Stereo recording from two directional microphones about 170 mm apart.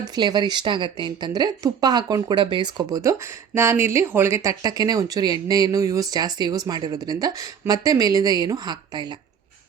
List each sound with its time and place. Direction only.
0.0 s a woman's voice: 25° right (ahead or behind)